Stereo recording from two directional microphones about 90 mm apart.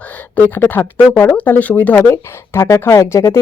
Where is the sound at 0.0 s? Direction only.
20° left (ahead or behind).